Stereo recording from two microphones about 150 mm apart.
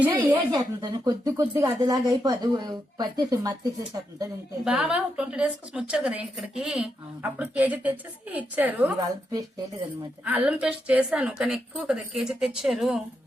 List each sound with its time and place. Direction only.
0.1 s speech: 25° right (ahead or behind)
4.6 s a woman's voice: 5° right (ahead or behind)
10.2 s a woman's voice: 10° right (ahead or behind)